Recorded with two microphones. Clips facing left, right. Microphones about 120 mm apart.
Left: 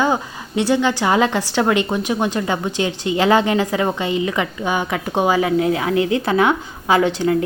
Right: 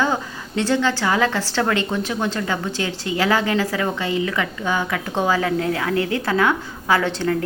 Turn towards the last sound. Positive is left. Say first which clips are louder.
# left 4 dB
turn(degrees=15)  # may be behind; listen again after turning